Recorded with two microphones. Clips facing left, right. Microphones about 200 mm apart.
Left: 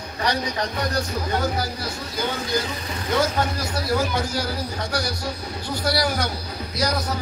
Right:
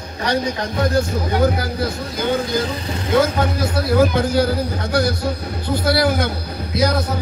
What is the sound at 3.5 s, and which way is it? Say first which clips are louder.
Speech: right 8 dB; 55° right (ahead or behind).